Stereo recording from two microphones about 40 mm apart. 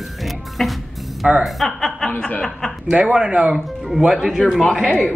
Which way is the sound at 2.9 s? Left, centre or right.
Right.